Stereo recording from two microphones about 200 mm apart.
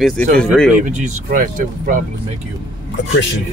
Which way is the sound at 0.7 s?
35° right (ahead or behind).